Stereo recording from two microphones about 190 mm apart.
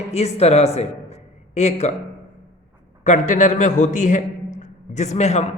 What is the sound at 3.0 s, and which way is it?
A man's voice, 40° left (ahead or behind).